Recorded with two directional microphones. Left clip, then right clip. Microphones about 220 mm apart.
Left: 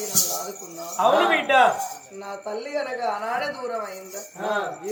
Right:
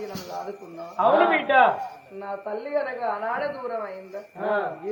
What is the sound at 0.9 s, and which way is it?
Speech, 10° left (ahead or behind).